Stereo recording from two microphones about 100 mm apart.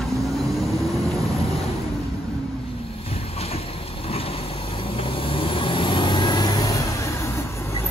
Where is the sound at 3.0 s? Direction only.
85° left; by 7.9 s 25° left (ahead or behind).